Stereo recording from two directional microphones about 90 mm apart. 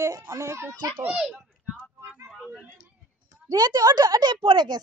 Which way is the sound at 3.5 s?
50° right (ahead or behind).